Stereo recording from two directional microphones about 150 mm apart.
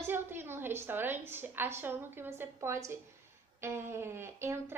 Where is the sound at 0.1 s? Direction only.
15° right (ahead or behind).